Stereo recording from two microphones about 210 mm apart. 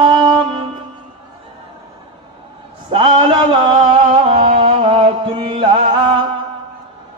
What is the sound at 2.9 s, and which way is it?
Music, 20° right (ahead or behind).